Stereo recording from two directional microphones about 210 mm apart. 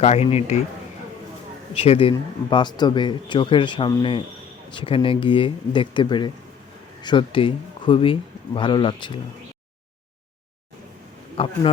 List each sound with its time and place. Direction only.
0.0 s speech: 30° left (ahead or behind)
1.7 s speech: 30° left (ahead or behind)
11.4 s speech: 25° left (ahead or behind)